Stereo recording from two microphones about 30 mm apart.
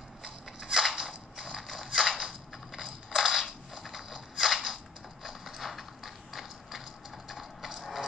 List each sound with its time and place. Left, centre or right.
0.2 s crushing: centre
0.9 s a sound: right
1.6 s mechanisms: centre
2.7 s crushing: centre
5.2 s mechanisms: centre
7.2 s a sound: centre
7.7 s music: centre